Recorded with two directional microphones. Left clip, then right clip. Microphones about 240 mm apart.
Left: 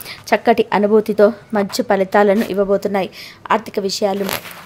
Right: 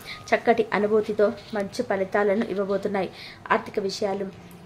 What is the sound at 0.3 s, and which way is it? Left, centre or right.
A woman's voice, left.